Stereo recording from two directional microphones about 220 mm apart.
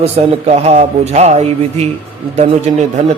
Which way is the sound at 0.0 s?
30° right (ahead or behind).